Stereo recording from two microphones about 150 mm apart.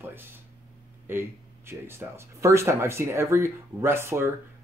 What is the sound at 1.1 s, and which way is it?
Speech, 15° right (ahead or behind).